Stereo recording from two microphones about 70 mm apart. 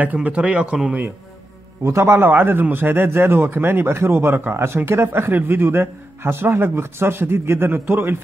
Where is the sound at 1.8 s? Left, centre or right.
Right.